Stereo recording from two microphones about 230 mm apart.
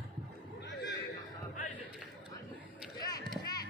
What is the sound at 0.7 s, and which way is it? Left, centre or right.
Neigh, left.